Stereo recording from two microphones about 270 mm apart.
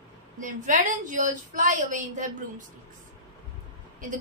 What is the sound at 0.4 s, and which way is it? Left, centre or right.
A woman's voice, right.